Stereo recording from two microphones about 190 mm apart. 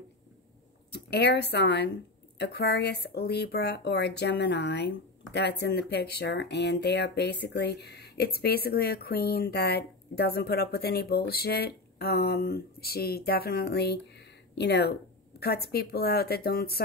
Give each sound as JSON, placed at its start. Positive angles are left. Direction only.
{"t": 0.9, "sound": "speech", "side_deg": 60}